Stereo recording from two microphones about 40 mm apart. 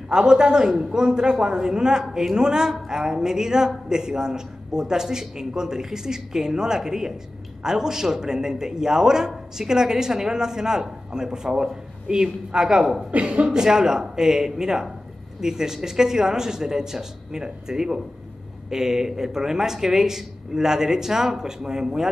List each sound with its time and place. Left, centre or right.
0.1 s a man's voice: centre
13.1 s speech: right
13.5 s a man's voice: centre